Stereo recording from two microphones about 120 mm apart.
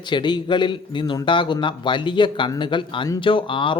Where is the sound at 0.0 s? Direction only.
40° left (ahead or behind).